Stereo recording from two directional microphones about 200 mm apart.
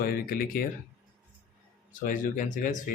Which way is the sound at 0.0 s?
45° left (ahead or behind).